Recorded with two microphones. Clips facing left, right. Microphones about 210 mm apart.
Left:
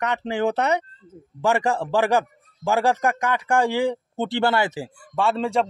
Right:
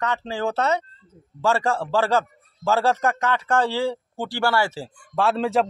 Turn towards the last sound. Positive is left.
turn(degrees=0)  # may be behind; listen again after turning